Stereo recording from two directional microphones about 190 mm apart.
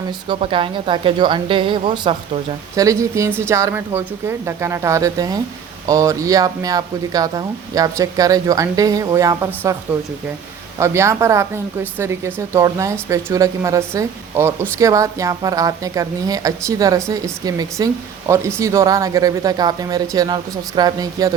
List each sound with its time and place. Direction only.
0.3 s a woman's voice: 25° right (ahead or behind)
10.8 s a woman's voice: 15° right (ahead or behind)